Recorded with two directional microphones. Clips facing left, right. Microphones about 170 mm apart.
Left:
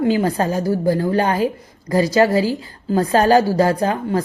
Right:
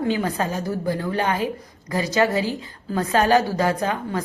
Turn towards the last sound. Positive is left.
turn(degrees=35)  # may be behind; listen again after turning